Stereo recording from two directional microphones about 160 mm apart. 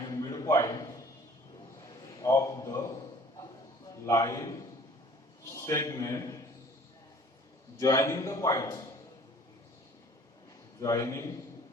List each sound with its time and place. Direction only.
0.0 s a sound: 20° left (ahead or behind)
4.0 s a man's voice: 20° left (ahead or behind)
5.6 s a man's voice: 20° left (ahead or behind)
7.8 s a man's voice: 20° left (ahead or behind)
10.8 s a man's voice: 20° left (ahead or behind)